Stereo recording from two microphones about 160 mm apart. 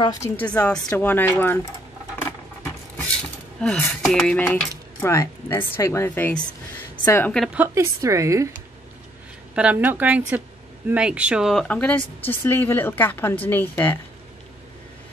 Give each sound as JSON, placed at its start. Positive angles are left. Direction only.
{"t": 0.0, "sound": "a woman's voice", "side_deg": 20}
{"t": 0.4, "sound": "a woman's voice", "side_deg": 10}
{"t": 3.6, "sound": "a sound", "side_deg": 5}
{"t": 5.0, "sound": "a woman's voice", "side_deg": 20}
{"t": 7.3, "sound": "a woman's voice", "side_deg": -5}
{"t": 9.6, "sound": "a woman's voice", "side_deg": -10}
{"t": 10.9, "sound": "a sound", "side_deg": -5}
{"t": 11.6, "sound": "a woman's voice", "side_deg": 10}